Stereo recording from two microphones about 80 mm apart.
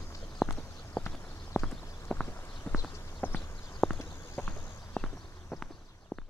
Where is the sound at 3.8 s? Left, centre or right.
Centre.